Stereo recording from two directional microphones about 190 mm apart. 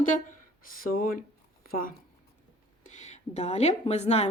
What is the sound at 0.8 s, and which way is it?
Speech, 50° left (ahead or behind).